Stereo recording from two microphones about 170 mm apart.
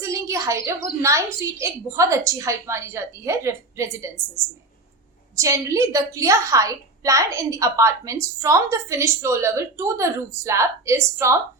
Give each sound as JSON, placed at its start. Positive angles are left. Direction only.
{"t": 0.0, "sound": "bird", "side_deg": -20}
{"t": 1.0, "sound": "a woman's voice", "side_deg": -15}
{"t": 5.4, "sound": "a woman's voice", "side_deg": -20}